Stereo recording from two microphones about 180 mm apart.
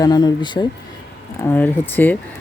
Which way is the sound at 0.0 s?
20° left (ahead or behind).